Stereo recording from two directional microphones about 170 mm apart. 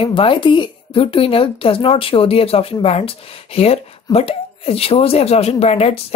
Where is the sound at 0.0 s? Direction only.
30° left (ahead or behind).